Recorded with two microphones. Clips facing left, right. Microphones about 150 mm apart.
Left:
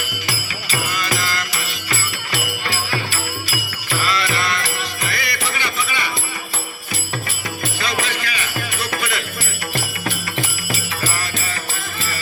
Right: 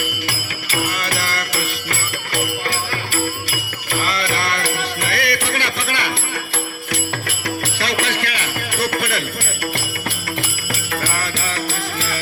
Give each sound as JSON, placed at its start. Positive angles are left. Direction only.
{"t": 0.3, "sound": "music", "side_deg": -60}
{"t": 7.8, "sound": "jingle bell", "side_deg": -70}
{"t": 10.7, "sound": "jingle bell", "side_deg": -60}